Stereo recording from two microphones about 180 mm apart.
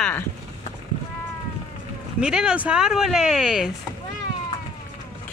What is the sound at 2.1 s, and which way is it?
Speech, 5° right (ahead or behind).